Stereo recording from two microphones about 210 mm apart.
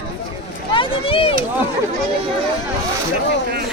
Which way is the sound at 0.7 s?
25° left (ahead or behind).